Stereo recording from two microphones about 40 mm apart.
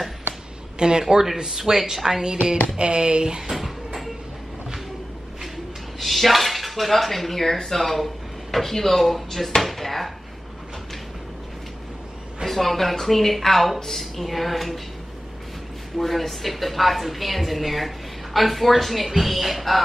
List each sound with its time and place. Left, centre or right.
0.7 s speech: centre
3.5 s a sound: centre
5.9 s a woman's voice: centre
12.4 s a woman's voice: centre
16.0 s a woman's voice: centre